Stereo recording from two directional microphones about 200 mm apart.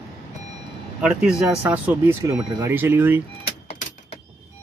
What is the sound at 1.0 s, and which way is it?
Speech, 5° right (ahead or behind).